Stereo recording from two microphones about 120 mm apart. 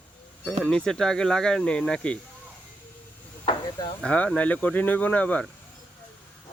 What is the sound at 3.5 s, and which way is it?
Chop, 35° left (ahead or behind).